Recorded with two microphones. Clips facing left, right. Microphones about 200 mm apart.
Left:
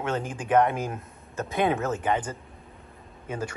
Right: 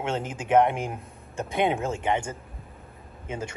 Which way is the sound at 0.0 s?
25° right (ahead or behind).